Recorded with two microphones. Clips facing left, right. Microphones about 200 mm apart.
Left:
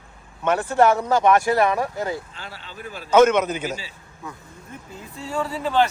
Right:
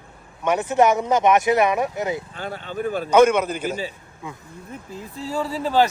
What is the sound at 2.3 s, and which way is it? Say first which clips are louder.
Speech: right 10 dB; 50° right (ahead or behind).